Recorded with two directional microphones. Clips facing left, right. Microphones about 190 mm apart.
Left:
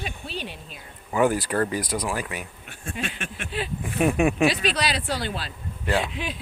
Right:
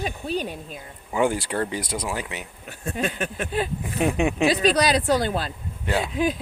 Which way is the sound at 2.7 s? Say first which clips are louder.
Right 6 dB; 40° right (ahead or behind).